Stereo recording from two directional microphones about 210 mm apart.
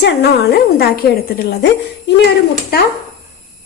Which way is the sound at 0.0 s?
55° left (ahead or behind).